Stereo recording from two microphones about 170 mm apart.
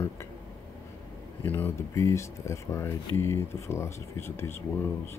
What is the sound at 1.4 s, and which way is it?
Speech, 10° left (ahead or behind).